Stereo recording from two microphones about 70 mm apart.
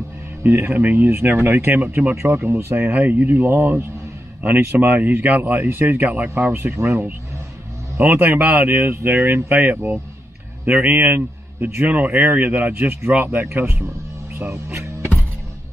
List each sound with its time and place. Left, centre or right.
0.4 s a man's voice: right